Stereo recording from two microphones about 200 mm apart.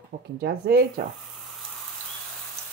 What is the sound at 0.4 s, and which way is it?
Speech, 50° right (ahead or behind).